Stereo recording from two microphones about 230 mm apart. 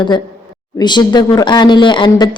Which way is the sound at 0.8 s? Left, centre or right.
Centre.